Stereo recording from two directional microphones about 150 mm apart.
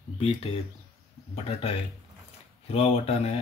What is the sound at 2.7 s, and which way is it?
Speech, 40° left (ahead or behind).